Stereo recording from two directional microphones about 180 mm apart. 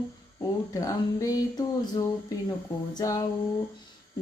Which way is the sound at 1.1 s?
20° left (ahead or behind).